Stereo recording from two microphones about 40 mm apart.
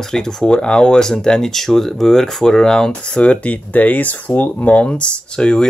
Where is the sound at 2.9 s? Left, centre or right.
Left.